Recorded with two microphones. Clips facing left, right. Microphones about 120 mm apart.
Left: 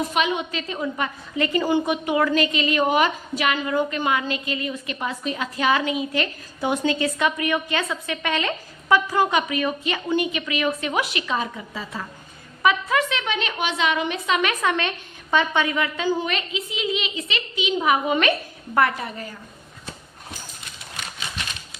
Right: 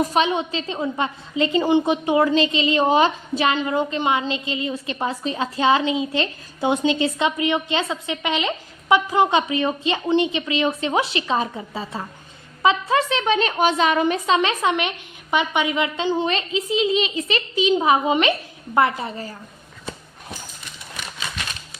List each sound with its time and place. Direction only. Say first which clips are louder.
0.0 s a woman's voice: right 3 dB; 35° right (ahead or behind)